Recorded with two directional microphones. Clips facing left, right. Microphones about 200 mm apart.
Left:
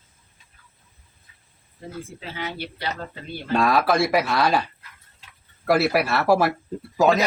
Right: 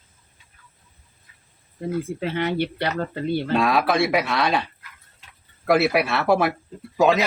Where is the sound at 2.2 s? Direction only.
60° right (ahead or behind).